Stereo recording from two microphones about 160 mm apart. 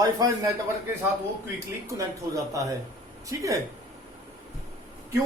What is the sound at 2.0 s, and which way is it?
Speech, 20° right (ahead or behind).